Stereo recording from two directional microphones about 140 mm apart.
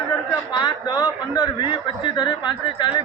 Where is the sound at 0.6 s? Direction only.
30° left (ahead or behind).